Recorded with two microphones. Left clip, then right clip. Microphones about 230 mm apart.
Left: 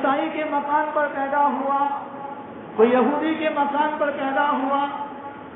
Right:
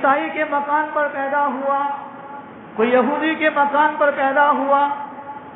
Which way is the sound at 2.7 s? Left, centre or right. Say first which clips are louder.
Right 1 dB; right.